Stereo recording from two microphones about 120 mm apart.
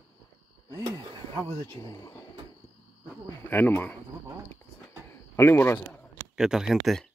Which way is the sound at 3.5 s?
15° left (ahead or behind).